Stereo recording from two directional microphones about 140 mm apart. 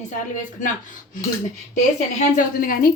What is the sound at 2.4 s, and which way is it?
Speech, 85° left.